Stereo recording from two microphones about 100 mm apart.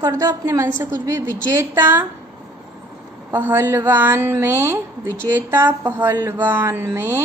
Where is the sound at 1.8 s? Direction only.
20° right (ahead or behind).